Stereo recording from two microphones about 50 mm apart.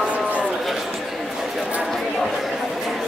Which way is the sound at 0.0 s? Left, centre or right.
Right.